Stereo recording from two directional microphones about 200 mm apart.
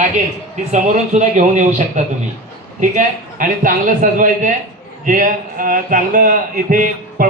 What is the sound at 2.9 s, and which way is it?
Speech, 40° right (ahead or behind).